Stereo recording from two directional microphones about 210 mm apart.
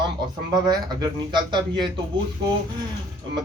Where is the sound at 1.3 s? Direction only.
20° right (ahead or behind).